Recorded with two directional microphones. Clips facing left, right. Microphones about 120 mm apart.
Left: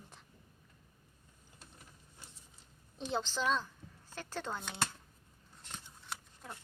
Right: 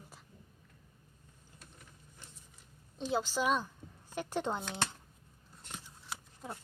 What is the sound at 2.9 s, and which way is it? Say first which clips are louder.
A woman's voice: right 3 dB; 5° right (ahead or behind).